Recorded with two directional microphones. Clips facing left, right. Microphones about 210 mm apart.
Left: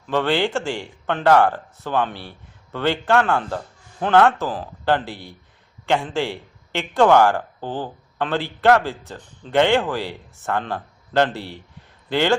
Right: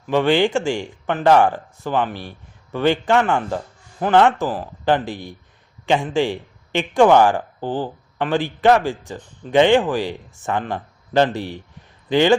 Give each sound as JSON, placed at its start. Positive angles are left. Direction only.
{"t": 0.1, "sound": "a man's voice", "side_deg": -15}